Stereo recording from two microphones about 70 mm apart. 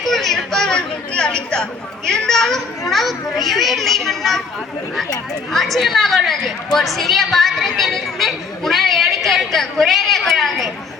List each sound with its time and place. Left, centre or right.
0.1 s a child's voice: centre
5.5 s a woman's voice: centre